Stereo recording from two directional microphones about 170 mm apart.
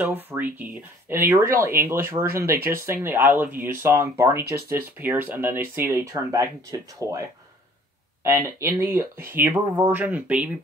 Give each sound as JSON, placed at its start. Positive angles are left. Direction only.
{"t": 0.0, "sound": "speech", "side_deg": -10}